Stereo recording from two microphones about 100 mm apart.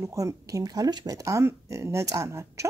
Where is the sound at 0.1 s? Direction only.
35° right (ahead or behind).